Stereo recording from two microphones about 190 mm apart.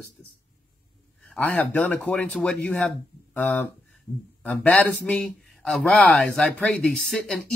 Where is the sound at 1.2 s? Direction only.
10° left (ahead or behind).